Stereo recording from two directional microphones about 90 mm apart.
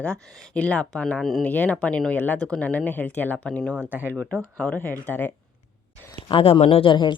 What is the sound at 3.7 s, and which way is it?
Speech, 20° right (ahead or behind).